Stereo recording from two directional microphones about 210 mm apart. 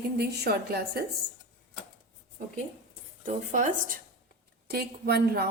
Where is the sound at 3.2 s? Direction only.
35° right (ahead or behind).